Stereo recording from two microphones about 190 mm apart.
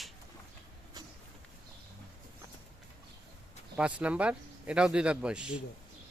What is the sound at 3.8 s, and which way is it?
Speech, 5° right (ahead or behind).